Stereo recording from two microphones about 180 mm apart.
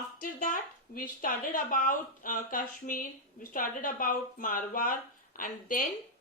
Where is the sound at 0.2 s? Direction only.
50° left (ahead or behind).